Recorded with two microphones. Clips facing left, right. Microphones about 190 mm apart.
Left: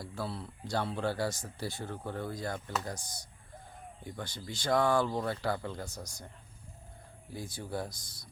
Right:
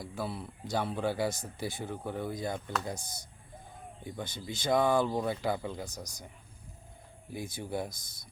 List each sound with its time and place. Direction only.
0.0 s speech: 15° right (ahead or behind)
4.0 s speech: 20° right (ahead or behind)
7.9 s speech: 50° right (ahead or behind)